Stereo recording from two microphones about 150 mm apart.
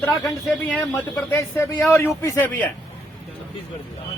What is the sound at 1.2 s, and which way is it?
Speech, 20° left (ahead or behind).